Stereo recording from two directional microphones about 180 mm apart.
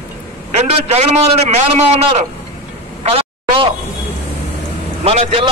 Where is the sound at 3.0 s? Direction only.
35° right (ahead or behind).